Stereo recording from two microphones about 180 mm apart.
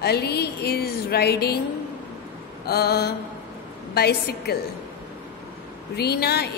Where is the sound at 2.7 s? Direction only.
60° left (ahead or behind).